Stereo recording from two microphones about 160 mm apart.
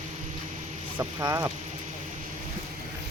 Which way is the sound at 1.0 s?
20° right (ahead or behind).